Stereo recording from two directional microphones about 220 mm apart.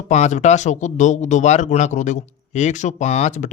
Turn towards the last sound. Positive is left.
turn(degrees=30)  # may be behind; listen again after turning